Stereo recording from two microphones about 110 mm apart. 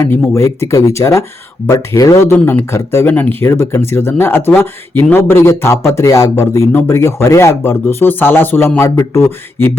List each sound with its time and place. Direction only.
0.0 s speech: 25° left (ahead or behind)
2.2 s speech: 20° left (ahead or behind)